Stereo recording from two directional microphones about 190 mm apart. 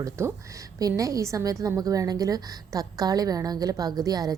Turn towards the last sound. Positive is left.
turn(degrees=-20)  # may be behind; listen again after turning